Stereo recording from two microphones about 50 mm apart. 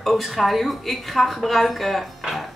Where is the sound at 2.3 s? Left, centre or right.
Centre.